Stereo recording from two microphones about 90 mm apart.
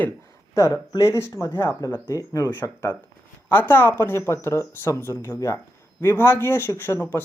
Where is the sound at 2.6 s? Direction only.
25° left (ahead or behind).